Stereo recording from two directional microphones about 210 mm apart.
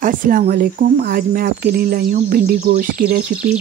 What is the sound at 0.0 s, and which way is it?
Speech, 40° right (ahead or behind).